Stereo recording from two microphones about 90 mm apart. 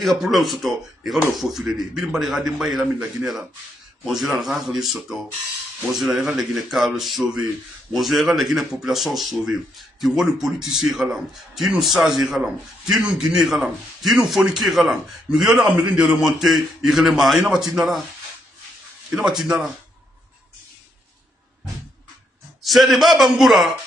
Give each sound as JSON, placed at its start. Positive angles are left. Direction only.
{"t": 0.0, "sound": "a man's voice", "side_deg": 0}
{"t": 4.0, "sound": "a man's voice", "side_deg": -5}
{"t": 19.1, "sound": "a man's voice", "side_deg": -5}
{"t": 22.6, "sound": "a man's voice", "side_deg": 0}